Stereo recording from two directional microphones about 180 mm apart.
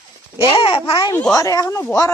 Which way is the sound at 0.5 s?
30° left (ahead or behind).